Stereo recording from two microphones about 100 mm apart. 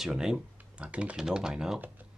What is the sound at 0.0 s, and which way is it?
Speech, 5° right (ahead or behind).